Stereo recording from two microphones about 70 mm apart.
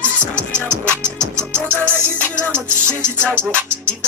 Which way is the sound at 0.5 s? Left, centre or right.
Centre.